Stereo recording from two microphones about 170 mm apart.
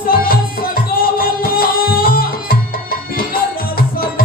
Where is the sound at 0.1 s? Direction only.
60° left (ahead or behind).